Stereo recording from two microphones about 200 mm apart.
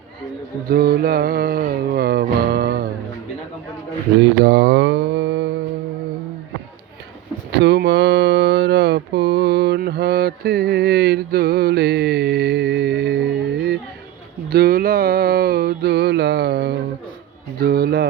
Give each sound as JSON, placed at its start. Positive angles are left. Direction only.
{"t": 0.7, "sound": "music", "side_deg": -50}
{"t": 4.2, "sound": "mantra", "side_deg": -60}
{"t": 7.5, "sound": "a sound", "side_deg": -55}
{"t": 14.5, "sound": "mantra", "side_deg": -50}
{"t": 17.6, "sound": "a man's voice", "side_deg": -50}